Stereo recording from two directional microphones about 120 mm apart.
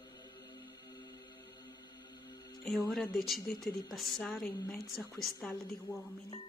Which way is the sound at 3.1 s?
Centre (ahead or behind).